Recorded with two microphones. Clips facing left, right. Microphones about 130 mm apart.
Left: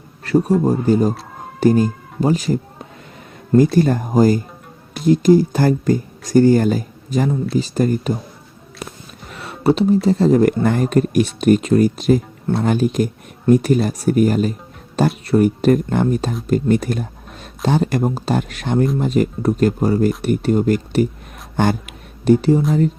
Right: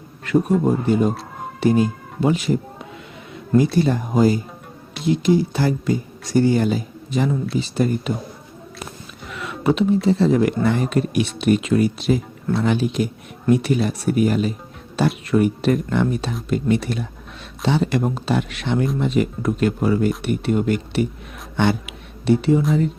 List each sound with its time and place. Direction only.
0.3 s speech: 35° left (ahead or behind)
3.8 s speech: 45° left (ahead or behind)
9.2 s a sound: 35° left (ahead or behind)
10.1 s speech: 40° left (ahead or behind)